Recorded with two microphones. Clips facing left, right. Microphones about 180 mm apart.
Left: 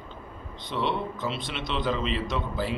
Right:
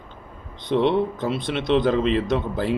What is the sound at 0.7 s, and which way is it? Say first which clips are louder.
A man's voice: right 9 dB; 55° right (ahead or behind).